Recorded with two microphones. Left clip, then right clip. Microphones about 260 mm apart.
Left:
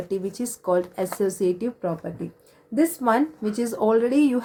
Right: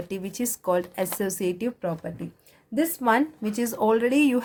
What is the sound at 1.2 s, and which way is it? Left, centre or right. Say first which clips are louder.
A woman's voice: left 7 dB; right.